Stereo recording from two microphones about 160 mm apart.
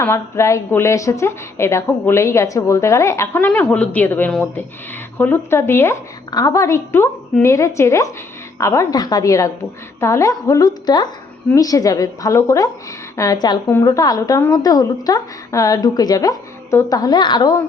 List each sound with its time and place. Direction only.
0.0 s a woman's voice: 15° left (ahead or behind)